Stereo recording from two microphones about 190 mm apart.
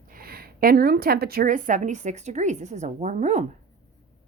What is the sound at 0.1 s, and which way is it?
A woman's voice, 50° right (ahead or behind).